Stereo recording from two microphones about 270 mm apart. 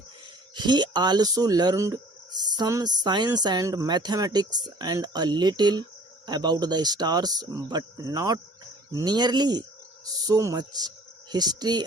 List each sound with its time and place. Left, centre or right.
0.5 s speech: centre